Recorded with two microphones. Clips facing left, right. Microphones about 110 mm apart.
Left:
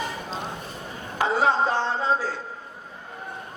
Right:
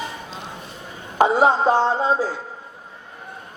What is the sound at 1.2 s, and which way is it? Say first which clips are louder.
A man's voice: right 5 dB; 15° right (ahead or behind).